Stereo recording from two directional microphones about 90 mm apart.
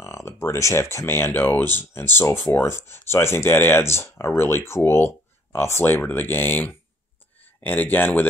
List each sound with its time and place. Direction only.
0.0 s speech: 30° left (ahead or behind)